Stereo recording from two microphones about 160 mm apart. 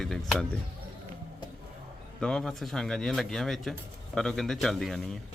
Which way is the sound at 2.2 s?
5° left (ahead or behind).